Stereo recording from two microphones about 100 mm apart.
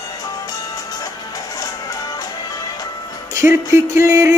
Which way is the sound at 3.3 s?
30° right (ahead or behind).